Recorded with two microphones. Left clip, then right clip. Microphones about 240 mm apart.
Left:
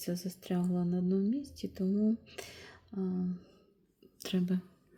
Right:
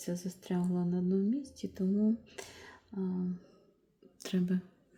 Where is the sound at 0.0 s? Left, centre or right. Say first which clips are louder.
Left 1 dB; centre.